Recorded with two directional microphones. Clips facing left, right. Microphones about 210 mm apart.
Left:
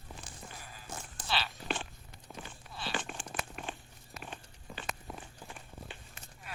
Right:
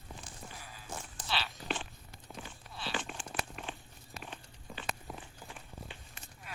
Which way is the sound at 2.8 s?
50° left (ahead or behind).